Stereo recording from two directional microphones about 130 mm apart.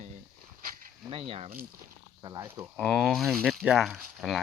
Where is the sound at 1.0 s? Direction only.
45° right (ahead or behind).